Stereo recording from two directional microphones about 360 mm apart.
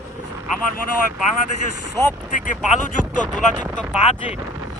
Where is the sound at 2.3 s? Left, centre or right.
Left.